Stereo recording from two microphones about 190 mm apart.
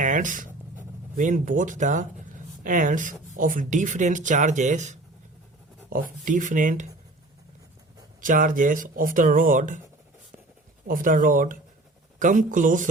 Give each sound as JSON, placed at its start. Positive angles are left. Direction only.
{"t": 0.0, "sound": "a sound", "side_deg": -45}
{"t": 2.6, "sound": "speech", "side_deg": -45}
{"t": 8.2, "sound": "speech", "side_deg": -45}
{"t": 10.8, "sound": "speech", "side_deg": -45}